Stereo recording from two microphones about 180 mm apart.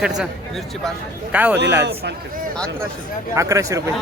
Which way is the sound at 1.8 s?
70° right (ahead or behind).